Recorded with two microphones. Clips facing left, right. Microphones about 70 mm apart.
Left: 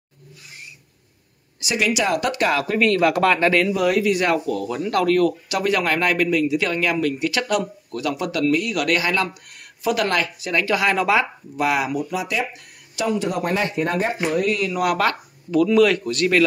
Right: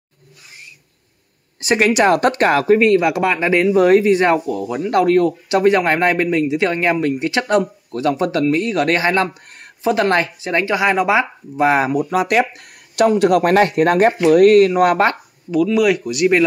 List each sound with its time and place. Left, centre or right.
1.6 s speech: right; by 3.7 s centre
3.7 s speech: right
4.5 s speech: centre; by 12.0 s right
12.0 s speech: right
14.7 s speech: right
15.5 s speech: centre